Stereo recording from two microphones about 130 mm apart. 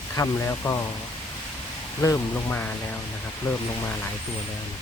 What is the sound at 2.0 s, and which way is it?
Speech, 20° left (ahead or behind).